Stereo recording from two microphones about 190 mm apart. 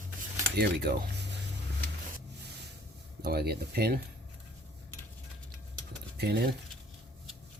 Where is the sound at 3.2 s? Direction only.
55° right (ahead or behind).